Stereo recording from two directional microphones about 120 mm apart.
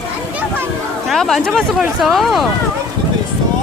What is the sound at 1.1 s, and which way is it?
Speech, centre (ahead or behind).